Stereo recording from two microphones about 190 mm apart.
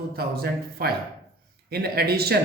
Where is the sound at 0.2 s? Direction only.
55° right (ahead or behind).